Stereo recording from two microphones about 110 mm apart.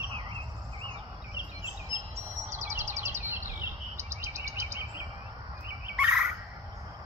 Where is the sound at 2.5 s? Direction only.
25° right (ahead or behind).